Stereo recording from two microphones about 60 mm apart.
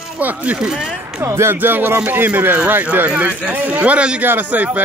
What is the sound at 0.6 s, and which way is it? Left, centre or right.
Speech, centre.